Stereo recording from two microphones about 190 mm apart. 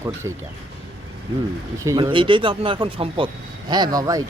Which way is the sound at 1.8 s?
20° right (ahead or behind).